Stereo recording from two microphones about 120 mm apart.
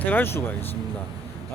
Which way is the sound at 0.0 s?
15° left (ahead or behind).